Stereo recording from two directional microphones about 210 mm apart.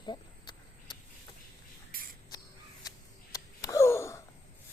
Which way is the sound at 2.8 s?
15° left (ahead or behind).